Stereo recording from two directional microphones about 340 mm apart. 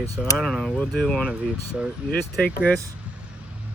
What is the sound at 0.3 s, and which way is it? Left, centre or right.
Speech, centre.